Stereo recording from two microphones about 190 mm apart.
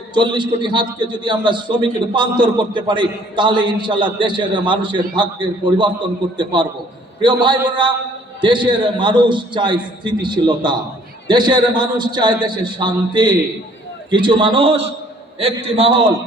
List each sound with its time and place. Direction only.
0.1 s a man's voice: 25° right (ahead or behind)